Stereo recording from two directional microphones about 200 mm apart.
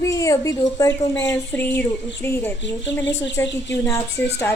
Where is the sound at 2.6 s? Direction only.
65° left (ahead or behind).